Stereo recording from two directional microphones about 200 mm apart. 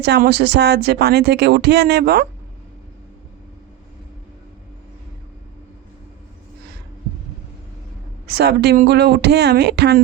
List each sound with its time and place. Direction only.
0.0 s speech: 55° right (ahead or behind)
8.3 s speech: 55° right (ahead or behind)